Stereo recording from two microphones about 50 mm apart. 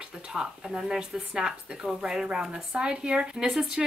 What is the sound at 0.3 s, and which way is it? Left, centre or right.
A woman's voice, centre.